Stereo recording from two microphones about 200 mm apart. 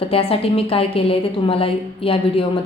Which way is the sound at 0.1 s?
30° left (ahead or behind).